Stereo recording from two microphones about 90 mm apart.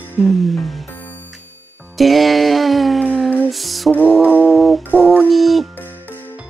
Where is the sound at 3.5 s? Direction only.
Centre (ahead or behind).